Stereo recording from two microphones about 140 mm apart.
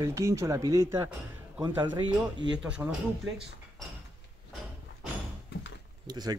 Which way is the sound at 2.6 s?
10° right (ahead or behind).